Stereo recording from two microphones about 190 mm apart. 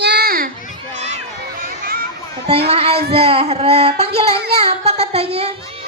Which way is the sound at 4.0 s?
30° right (ahead or behind).